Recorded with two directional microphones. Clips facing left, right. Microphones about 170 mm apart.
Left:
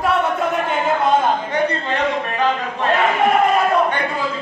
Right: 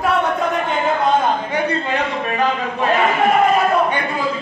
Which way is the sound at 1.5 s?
10° right (ahead or behind).